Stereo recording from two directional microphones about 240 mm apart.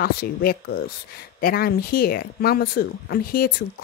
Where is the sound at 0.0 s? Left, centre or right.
Left.